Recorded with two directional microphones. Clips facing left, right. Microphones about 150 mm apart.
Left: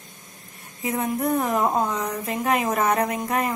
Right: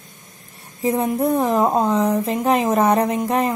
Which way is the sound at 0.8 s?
30° right (ahead or behind).